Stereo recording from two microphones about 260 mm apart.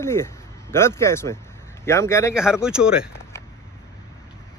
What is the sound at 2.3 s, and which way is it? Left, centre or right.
Speech, centre.